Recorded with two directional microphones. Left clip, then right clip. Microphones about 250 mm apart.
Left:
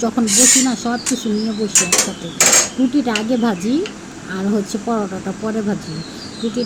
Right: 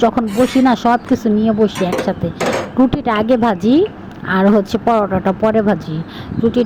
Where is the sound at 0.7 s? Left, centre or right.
Right.